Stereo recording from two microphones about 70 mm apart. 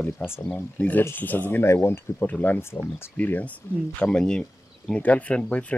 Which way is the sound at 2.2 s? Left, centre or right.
Left.